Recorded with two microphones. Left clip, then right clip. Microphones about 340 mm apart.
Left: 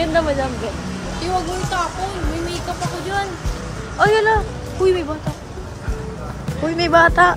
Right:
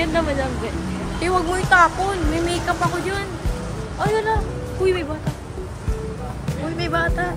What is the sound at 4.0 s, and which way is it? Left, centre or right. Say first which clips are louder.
Speech: left 6 dB; left.